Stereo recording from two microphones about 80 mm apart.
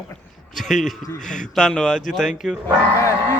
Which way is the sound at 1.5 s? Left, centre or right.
Centre.